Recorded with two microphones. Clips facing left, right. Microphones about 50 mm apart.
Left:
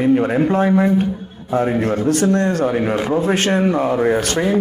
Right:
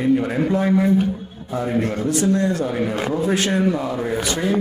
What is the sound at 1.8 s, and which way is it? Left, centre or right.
A man's voice, left.